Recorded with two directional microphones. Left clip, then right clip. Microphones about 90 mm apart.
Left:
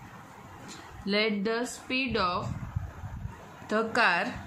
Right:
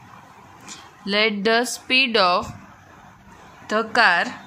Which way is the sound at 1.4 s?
85° right.